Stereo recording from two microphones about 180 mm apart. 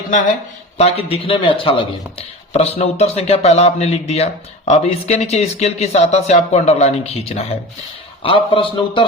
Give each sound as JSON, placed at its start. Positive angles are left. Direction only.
{"t": 0.8, "sound": "speech", "side_deg": 35}